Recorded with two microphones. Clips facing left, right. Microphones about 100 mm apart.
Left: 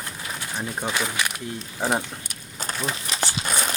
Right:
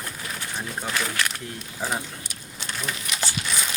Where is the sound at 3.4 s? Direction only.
45° left (ahead or behind).